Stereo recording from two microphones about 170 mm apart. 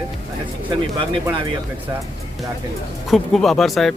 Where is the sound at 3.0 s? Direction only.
Centre (ahead or behind).